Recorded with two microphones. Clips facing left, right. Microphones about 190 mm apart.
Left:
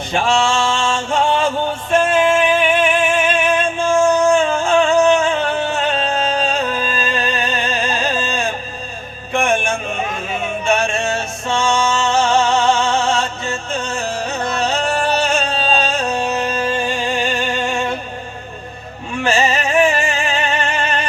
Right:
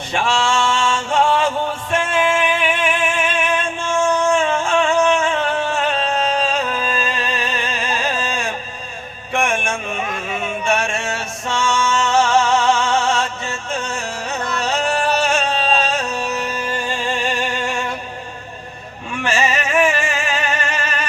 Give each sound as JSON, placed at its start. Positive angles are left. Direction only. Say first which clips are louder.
{"t": 0.4, "sound": "music", "louder": "left 1 dB", "side_deg": 35}
{"t": 19.2, "sound": "music", "louder": "left 3 dB", "side_deg": 35}